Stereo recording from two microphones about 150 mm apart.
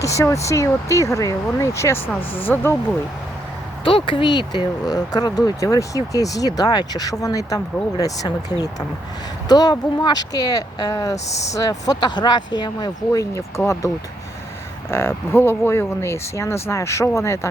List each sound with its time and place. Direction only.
0.0 s speech: 20° left (ahead or behind)
3.8 s speech: 35° left (ahead or behind)
14.8 s speech: 15° left (ahead or behind)